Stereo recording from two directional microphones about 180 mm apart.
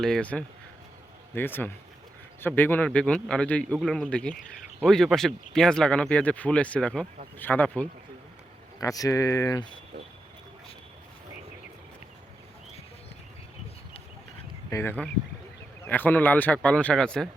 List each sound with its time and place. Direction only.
0.0 s speech: 5° left (ahead or behind)
14.7 s speech: 15° left (ahead or behind)